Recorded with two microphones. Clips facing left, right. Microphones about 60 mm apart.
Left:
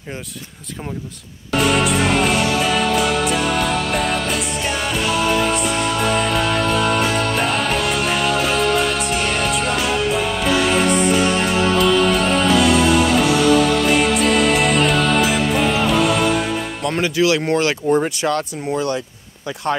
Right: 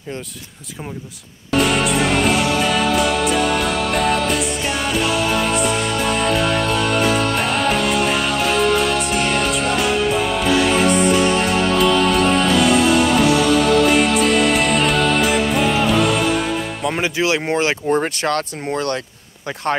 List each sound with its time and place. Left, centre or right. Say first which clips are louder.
1.6 s music: even; centre
17.2 s speech: left 2 dB; right
18.0 s speech: even; right